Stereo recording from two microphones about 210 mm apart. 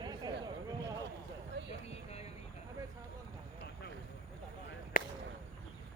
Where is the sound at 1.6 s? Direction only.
55° right (ahead or behind).